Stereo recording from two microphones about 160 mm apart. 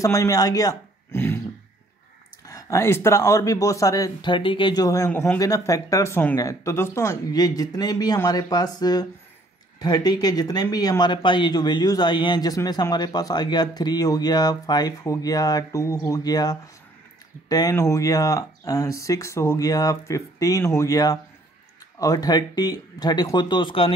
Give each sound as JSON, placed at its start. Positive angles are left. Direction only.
{"t": 0.0, "sound": "speech", "side_deg": 20}
{"t": 2.4, "sound": "speech", "side_deg": 20}